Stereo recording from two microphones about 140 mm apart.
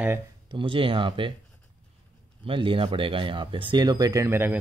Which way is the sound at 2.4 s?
40° right (ahead or behind).